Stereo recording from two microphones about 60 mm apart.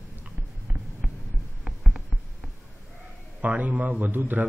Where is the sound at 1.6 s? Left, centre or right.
Centre.